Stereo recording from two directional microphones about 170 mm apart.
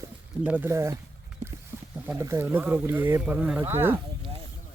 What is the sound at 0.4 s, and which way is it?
Speech, 10° right (ahead or behind).